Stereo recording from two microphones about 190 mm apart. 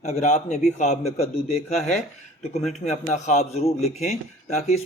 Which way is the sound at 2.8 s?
35° left (ahead or behind).